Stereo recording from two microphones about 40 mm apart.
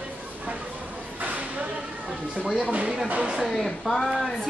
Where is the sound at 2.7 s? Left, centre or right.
Right.